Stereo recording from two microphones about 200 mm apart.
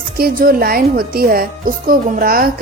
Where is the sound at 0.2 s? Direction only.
45° right (ahead or behind).